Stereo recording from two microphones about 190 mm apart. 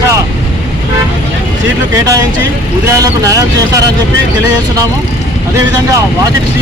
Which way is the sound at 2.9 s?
15° right (ahead or behind).